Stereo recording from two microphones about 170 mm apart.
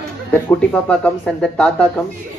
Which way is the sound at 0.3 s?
5° left (ahead or behind).